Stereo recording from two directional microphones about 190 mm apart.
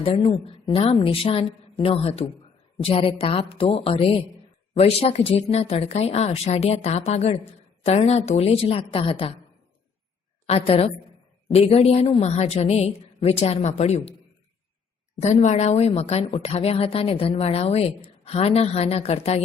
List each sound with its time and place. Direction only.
0.0 s a woman's voice: 30° left (ahead or behind)
10.4 s a woman's voice: 30° left (ahead or behind)
15.2 s a woman's voice: 35° left (ahead or behind)